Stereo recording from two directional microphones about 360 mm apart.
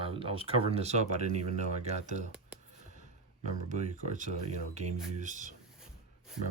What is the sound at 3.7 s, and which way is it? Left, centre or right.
Speech, right.